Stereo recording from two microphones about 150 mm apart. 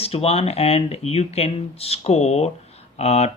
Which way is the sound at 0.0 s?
40° left (ahead or behind).